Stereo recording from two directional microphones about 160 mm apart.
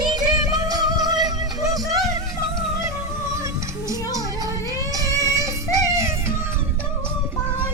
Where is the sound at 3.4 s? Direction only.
20° right (ahead or behind).